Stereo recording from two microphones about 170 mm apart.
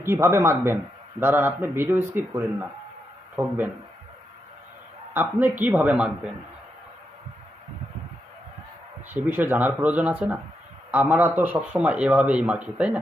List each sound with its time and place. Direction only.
0.0 s a man's voice: 15° right (ahead or behind)
5.1 s a man's voice: 10° right (ahead or behind)
9.2 s a man's voice: 10° right (ahead or behind)